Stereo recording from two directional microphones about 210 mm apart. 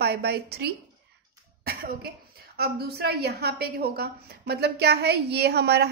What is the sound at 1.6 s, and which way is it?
Cough, 45° right (ahead or behind).